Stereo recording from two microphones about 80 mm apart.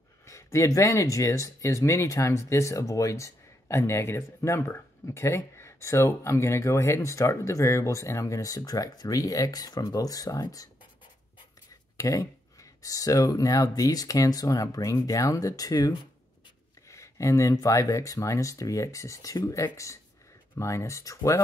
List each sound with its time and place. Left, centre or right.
0.2 s speech: left
12.0 s speech: left
16.8 s speech: left